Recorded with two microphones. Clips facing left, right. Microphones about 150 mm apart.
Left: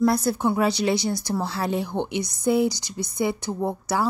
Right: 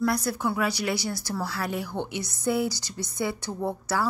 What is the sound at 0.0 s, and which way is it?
Speech, 25° left (ahead or behind).